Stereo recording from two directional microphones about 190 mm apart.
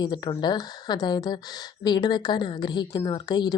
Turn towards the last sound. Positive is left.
turn(degrees=20)  # may be behind; listen again after turning